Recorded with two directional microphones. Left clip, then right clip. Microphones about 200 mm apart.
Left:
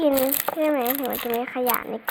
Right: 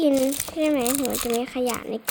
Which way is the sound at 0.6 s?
55° right (ahead or behind).